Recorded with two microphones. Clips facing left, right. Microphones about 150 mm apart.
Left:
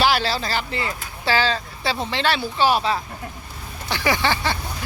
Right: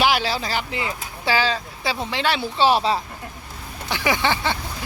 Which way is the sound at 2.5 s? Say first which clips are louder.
Right 2 dB; 30° right (ahead or behind).